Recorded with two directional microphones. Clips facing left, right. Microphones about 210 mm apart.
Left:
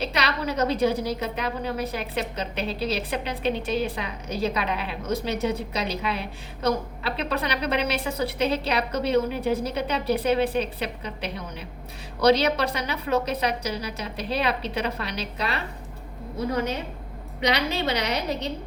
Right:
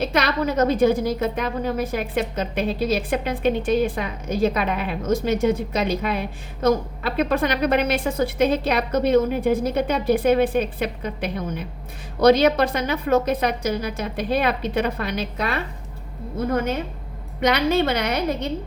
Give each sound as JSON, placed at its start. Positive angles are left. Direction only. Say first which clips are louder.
{"t": 0.0, "sound": "a woman's voice", "louder": "right 5 dB", "side_deg": -50}